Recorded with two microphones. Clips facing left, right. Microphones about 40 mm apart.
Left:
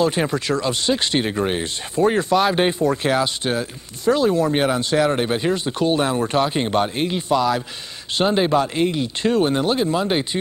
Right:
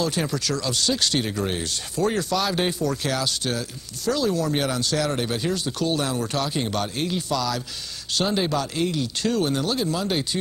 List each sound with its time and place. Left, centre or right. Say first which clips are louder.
0.0 s speech: left 5 dB; left